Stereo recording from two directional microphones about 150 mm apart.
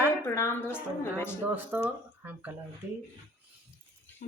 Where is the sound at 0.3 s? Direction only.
20° left (ahead or behind).